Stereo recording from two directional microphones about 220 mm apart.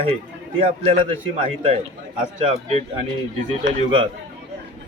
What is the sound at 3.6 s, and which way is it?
Speech, 55° right (ahead or behind).